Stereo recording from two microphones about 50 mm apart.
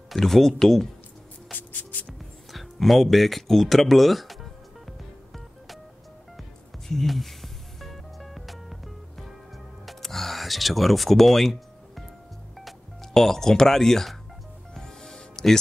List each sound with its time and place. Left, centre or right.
0.1 s speech: centre
1.5 s music: left
2.5 s speech: centre
6.9 s music: centre
12.5 s speech: centre
14.7 s music: centre